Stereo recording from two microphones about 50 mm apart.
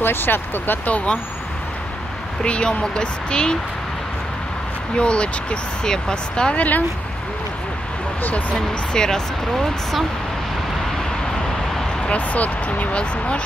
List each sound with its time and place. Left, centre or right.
0.0 s speech: left
0.8 s speech: left
2.4 s speech: left
4.9 s speech: left
8.2 s speech: left
8.5 s speech: centre
12.1 s speech: left